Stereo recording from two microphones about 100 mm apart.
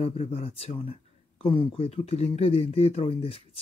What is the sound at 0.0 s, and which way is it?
Speech, 85° left.